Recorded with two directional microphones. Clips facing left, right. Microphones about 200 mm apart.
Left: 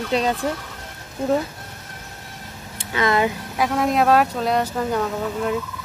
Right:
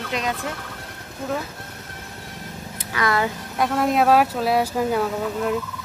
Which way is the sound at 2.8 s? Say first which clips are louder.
Left 3 dB; 25° left (ahead or behind).